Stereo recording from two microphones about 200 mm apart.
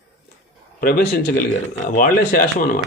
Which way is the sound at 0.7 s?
50° left (ahead or behind).